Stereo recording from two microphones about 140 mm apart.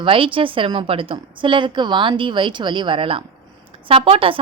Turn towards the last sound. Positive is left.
turn(degrees=-40)  # may be behind; listen again after turning